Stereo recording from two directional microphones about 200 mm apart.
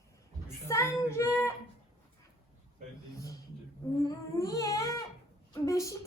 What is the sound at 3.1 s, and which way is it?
A child's voice, 15° left (ahead or behind).